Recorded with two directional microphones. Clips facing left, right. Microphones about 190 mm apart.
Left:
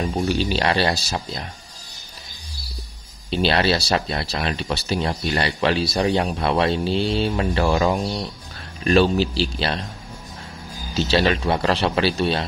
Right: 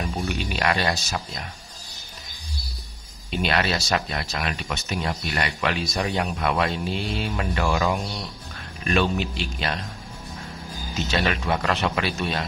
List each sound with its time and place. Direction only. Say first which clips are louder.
0.0 s speech: left 6 dB; 30° left (ahead or behind)
3.3 s speech: left 5 dB; 30° left (ahead or behind)
11.0 s speech: left 6 dB; 30° left (ahead or behind)